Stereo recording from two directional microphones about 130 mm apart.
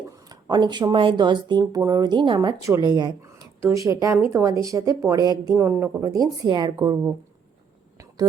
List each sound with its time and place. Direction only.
0.4 s a woman's voice: 35° right (ahead or behind)
5.5 s a woman's voice: 20° right (ahead or behind); by 6.9 s 35° right (ahead or behind)